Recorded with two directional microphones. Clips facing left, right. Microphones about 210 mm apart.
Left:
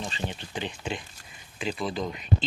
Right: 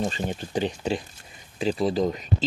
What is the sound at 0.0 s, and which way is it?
Speech, 45° right (ahead or behind).